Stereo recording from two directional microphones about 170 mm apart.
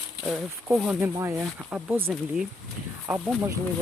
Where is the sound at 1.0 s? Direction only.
15° right (ahead or behind).